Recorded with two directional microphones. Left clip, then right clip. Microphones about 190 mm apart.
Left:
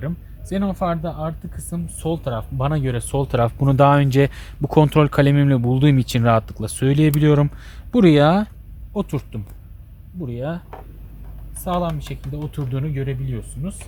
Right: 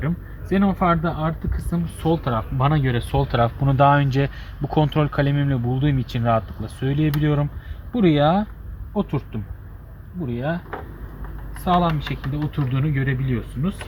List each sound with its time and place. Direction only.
0.0 s speech: 45° left (ahead or behind)
11.6 s speech: 50° left (ahead or behind)